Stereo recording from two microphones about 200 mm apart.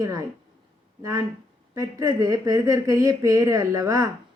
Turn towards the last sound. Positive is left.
turn(degrees=-15)  # may be behind; listen again after turning